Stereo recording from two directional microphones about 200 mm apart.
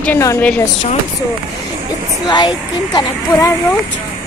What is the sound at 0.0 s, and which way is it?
Speech, 10° left (ahead or behind).